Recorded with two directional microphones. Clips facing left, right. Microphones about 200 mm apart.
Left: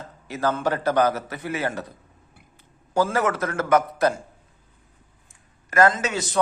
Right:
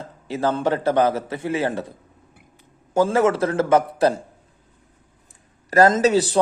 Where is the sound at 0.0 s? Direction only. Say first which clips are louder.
Right 2 dB; 30° right (ahead or behind).